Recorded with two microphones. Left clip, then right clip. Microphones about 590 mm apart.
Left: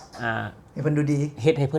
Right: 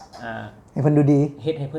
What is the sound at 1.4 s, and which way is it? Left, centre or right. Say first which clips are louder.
Speech: left 5 dB; left.